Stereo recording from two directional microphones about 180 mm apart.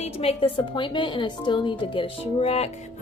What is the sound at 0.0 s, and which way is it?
Speech, 35° left (ahead or behind).